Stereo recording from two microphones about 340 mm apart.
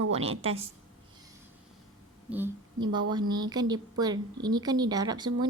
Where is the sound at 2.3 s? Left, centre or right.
Centre.